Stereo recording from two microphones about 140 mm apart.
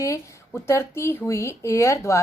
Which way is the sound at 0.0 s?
20° left (ahead or behind).